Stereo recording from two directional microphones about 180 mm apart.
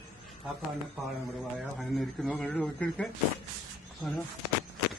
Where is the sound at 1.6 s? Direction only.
Centre (ahead or behind).